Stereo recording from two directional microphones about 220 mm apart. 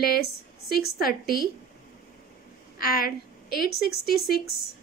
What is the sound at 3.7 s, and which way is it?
Speech, 45° left (ahead or behind).